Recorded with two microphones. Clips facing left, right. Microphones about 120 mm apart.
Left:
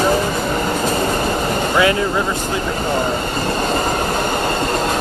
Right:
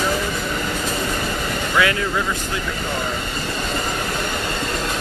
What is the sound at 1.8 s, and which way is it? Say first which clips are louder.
Speech: left 3 dB; 25° left (ahead or behind).